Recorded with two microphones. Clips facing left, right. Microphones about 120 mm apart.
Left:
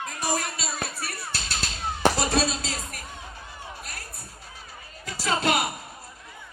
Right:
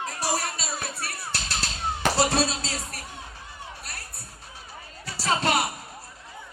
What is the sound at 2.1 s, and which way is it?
Music, 30° right (ahead or behind).